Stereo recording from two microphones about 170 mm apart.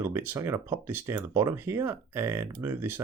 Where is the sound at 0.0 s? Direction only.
15° right (ahead or behind).